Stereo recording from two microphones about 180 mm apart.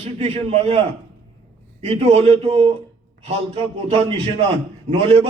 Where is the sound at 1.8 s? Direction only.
35° right (ahead or behind).